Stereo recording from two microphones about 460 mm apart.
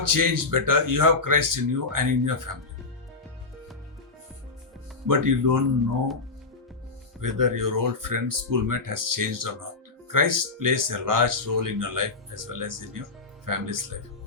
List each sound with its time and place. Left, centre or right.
0.0 s speech: right
5.0 s speech: right
7.2 s speech: right